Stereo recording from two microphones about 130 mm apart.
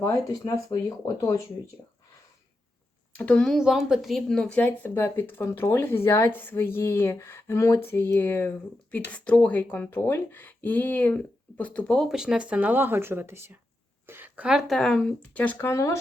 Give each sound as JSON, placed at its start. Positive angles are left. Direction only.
{"t": 0.0, "sound": "speech", "side_deg": 25}
{"t": 3.2, "sound": "a woman's voice", "side_deg": 10}
{"t": 3.6, "sound": "a woman's voice", "side_deg": -5}
{"t": 12.0, "sound": "a woman's voice", "side_deg": -5}